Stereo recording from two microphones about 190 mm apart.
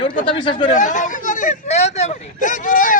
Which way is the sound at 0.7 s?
40° left (ahead or behind).